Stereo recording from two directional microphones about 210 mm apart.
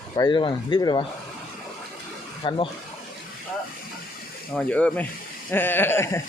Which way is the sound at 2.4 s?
25° left (ahead or behind).